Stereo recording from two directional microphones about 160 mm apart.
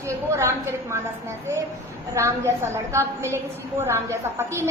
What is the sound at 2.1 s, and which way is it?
A woman's voice, 15° right (ahead or behind).